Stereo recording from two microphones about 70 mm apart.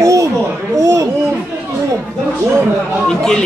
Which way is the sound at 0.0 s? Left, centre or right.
Right.